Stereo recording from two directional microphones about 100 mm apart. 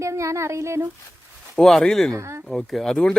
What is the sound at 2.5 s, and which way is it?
Speech, 5° left (ahead or behind).